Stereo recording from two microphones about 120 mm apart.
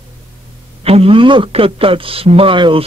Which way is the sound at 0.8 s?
55° right (ahead or behind).